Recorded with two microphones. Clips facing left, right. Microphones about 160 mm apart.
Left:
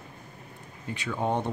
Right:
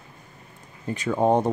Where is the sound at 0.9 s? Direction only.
45° right (ahead or behind).